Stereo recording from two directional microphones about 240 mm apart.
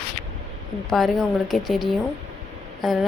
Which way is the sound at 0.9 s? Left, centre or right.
Centre.